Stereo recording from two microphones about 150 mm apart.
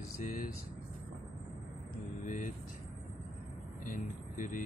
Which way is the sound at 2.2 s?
60° left (ahead or behind).